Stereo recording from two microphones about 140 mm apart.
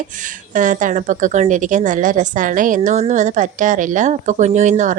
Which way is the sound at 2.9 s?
55° right (ahead or behind).